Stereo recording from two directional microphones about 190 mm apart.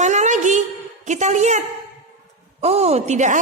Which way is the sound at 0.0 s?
40° right (ahead or behind).